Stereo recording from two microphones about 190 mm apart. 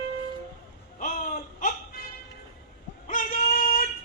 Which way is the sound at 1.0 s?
45° left (ahead or behind).